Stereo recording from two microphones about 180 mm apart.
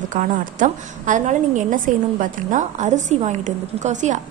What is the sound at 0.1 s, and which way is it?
A woman's voice, 45° right (ahead or behind).